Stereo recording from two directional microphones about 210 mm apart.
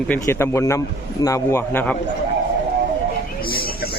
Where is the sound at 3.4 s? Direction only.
45° left (ahead or behind).